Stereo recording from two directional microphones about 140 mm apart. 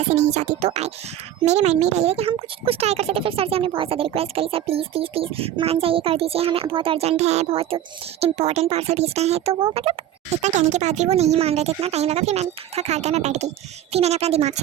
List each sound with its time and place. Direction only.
0.0 s speech: 50° right (ahead or behind)
10.4 s speech: 55° right (ahead or behind)